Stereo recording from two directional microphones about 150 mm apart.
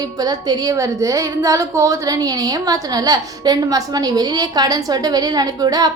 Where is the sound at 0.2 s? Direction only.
25° right (ahead or behind).